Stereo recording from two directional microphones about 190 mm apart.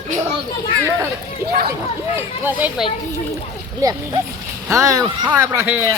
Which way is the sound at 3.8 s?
20° right (ahead or behind).